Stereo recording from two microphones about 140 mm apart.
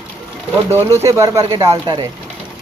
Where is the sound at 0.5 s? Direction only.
15° right (ahead or behind); by 2.1 s 30° right (ahead or behind).